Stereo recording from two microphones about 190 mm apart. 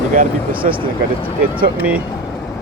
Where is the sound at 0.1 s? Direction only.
45° right (ahead or behind).